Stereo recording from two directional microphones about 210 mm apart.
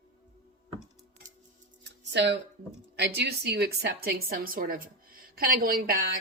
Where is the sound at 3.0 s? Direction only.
50° right (ahead or behind).